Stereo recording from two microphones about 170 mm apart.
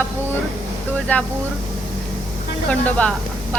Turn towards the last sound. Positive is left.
turn(degrees=5)  # may be behind; listen again after turning